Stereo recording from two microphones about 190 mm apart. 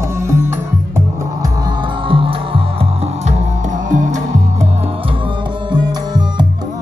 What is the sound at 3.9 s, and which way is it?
Music, 40° right (ahead or behind).